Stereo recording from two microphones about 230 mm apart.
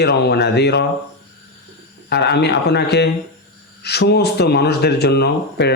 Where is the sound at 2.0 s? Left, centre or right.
Left.